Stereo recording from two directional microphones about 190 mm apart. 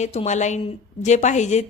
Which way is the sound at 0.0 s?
35° left (ahead or behind).